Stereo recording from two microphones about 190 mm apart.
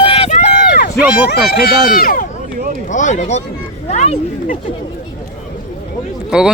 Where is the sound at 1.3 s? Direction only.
55° left (ahead or behind).